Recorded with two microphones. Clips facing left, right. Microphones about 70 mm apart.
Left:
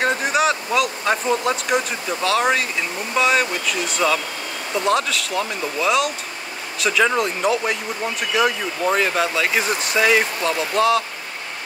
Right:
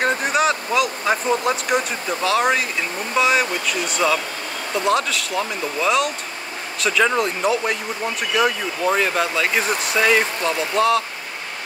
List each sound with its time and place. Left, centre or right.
0.0 s speech: centre